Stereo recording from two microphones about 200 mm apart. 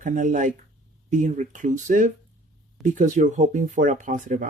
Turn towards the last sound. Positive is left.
turn(degrees=-40)  # may be behind; listen again after turning